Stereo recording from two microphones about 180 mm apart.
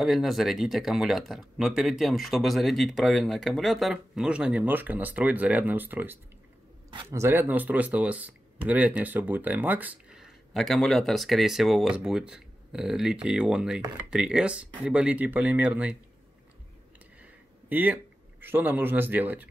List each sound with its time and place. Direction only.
0.0 s speech: centre (ahead or behind)
17.6 s speech: 10° right (ahead or behind)